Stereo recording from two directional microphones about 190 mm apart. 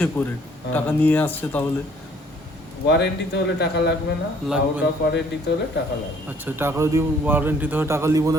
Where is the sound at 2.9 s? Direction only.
65° left (ahead or behind).